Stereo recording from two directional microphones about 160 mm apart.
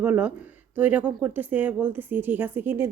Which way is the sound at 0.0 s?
10° right (ahead or behind).